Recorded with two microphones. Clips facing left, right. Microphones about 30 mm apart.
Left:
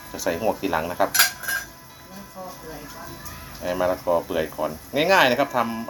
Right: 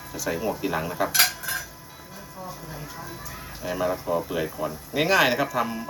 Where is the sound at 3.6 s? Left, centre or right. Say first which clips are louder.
Left 4 dB; left.